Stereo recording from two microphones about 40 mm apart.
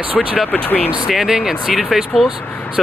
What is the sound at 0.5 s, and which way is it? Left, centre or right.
Speech, left.